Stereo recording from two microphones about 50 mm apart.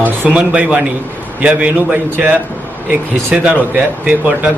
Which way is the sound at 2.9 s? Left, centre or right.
Right.